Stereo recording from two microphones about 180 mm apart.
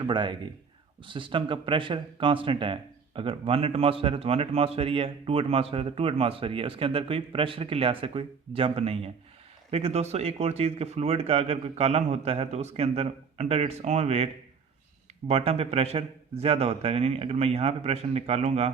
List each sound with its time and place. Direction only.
0.0 s speech: 25° right (ahead or behind)
15.3 s speech: 35° right (ahead or behind)